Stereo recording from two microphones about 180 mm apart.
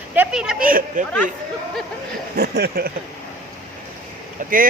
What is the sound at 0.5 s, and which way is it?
Speech, 50° right (ahead or behind).